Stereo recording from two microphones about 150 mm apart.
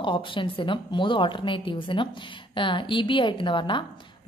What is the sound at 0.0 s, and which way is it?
A woman's voice, 35° left (ahead or behind).